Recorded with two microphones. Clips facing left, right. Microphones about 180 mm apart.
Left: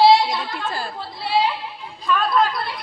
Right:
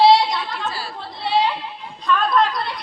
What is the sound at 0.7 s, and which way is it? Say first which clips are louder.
Speech: left 2 dB; 50° left (ahead or behind).